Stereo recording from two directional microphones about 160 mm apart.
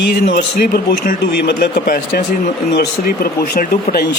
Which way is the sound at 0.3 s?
80° left.